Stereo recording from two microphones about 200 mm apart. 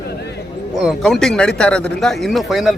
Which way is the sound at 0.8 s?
Centre (ahead or behind).